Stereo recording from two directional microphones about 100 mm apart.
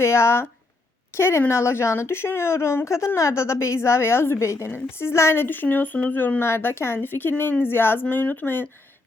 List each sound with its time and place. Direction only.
0.0 s speech: 25° left (ahead or behind)